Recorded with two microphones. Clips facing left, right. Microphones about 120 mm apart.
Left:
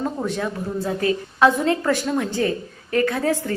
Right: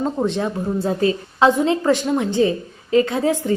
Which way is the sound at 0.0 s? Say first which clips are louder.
Right 4 dB; 25° right (ahead or behind).